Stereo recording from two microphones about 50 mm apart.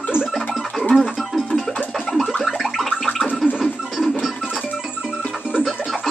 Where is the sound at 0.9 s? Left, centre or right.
Centre.